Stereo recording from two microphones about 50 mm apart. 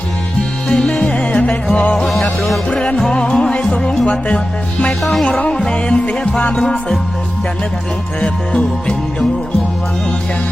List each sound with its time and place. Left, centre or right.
0.7 s music: left
5.4 s music: centre
8.2 s music: centre